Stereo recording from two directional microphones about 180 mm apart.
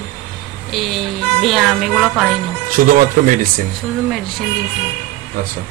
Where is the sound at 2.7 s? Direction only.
50° right (ahead or behind).